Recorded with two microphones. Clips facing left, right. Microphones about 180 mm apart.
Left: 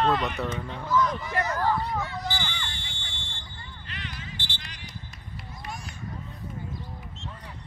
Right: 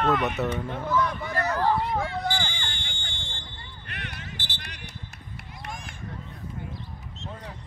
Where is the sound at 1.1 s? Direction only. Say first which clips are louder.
Right 1 dB; 60° right (ahead or behind).